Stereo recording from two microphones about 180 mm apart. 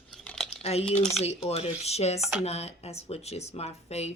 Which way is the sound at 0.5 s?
35° left (ahead or behind).